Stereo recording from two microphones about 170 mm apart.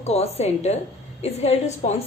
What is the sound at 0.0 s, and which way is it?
A woman's voice, 40° left (ahead or behind).